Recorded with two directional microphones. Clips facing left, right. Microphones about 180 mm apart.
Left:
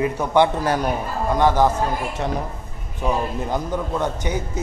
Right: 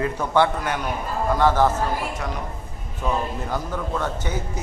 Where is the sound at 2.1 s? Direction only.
30° left (ahead or behind).